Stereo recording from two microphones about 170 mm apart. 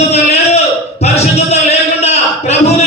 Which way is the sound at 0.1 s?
40° left (ahead or behind).